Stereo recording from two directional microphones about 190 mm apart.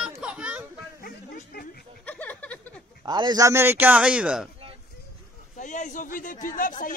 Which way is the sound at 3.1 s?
20° right (ahead or behind).